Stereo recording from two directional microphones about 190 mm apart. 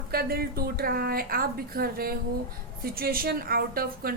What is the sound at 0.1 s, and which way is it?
A woman's voice, 55° right (ahead or behind).